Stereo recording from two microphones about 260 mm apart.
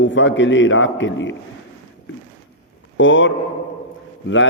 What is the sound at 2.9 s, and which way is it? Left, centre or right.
Speech, left.